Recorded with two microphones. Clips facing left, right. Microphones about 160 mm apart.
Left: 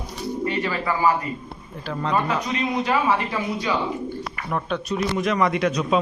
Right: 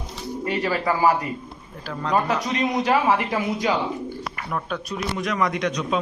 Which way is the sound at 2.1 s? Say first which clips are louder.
Right 2 dB; 40° right (ahead or behind).